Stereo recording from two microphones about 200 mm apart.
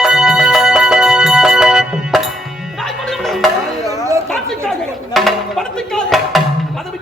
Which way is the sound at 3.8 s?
15° right (ahead or behind).